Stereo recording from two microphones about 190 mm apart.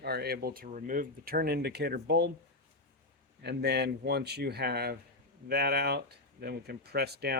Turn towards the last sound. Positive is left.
turn(degrees=-55)  # may be behind; listen again after turning